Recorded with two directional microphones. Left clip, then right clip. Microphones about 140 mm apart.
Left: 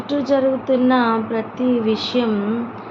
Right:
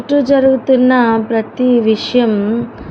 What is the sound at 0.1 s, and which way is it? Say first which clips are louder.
A woman's voice: right 7 dB; 90° right.